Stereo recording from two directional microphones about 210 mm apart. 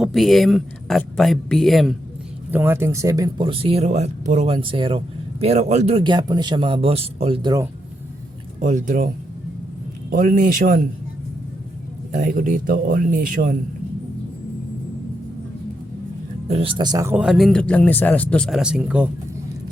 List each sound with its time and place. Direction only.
0.0 s speech: centre (ahead or behind); by 7.6 s 20° right (ahead or behind)
8.6 s speech: 35° right (ahead or behind)
10.1 s speech: 40° right (ahead or behind)
12.1 s speech: 40° right (ahead or behind)
16.5 s speech: 25° right (ahead or behind); by 19.0 s 5° right (ahead or behind)